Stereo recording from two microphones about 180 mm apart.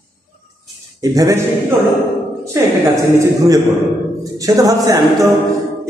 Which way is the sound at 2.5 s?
15° right (ahead or behind).